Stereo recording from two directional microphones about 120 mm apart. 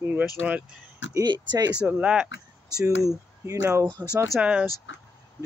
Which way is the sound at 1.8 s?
10° right (ahead or behind).